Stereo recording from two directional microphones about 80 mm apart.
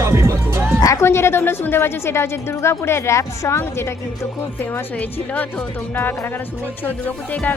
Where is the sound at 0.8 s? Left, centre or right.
Left.